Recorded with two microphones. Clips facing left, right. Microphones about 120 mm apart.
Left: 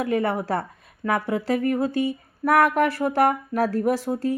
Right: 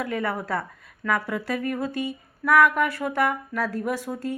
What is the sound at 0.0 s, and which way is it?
A woman's voice, 25° left (ahead or behind).